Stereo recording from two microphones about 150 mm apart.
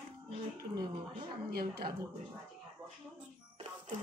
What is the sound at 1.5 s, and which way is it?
Speech, 90° right.